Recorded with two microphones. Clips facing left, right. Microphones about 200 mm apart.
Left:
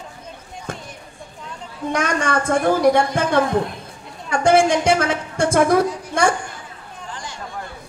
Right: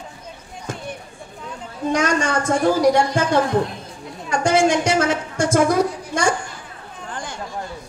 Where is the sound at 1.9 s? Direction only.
60° left (ahead or behind).